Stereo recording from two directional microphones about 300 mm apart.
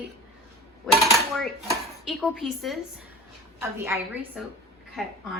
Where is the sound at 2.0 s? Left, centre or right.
Centre.